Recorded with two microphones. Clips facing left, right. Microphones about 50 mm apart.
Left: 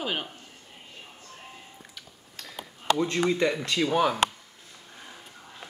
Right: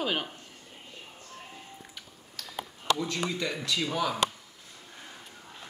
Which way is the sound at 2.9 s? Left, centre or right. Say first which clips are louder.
Left 5 dB; left.